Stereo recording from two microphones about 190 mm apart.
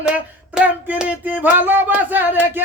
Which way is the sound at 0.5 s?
5° right (ahead or behind).